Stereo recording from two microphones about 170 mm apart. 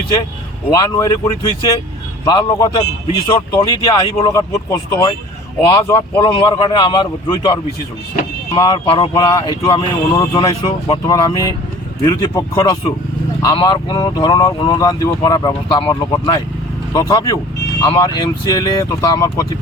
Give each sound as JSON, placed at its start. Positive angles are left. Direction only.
{"t": 0.7, "sound": "speech", "side_deg": 20}